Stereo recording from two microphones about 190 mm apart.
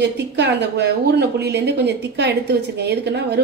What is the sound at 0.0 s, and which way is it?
A woman's voice, 65° right (ahead or behind).